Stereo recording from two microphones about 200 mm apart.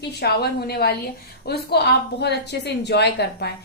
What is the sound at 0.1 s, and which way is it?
A woman's voice, 55° left (ahead or behind).